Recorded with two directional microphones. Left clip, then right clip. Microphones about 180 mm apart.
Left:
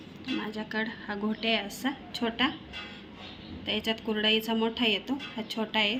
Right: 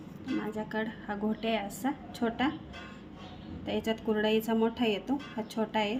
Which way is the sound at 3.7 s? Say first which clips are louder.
Left 1 dB; 30° right (ahead or behind).